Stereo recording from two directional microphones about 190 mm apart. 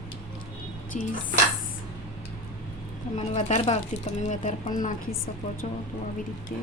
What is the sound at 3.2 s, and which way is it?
Speech, 35° left (ahead or behind).